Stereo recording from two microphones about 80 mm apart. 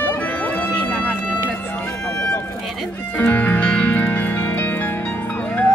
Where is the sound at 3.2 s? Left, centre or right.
Centre.